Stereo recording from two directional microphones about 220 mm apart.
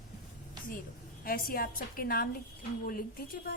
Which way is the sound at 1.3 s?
40° left (ahead or behind).